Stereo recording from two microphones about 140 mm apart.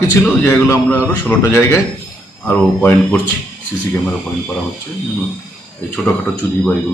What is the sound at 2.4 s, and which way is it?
Speech, 10° left (ahead or behind).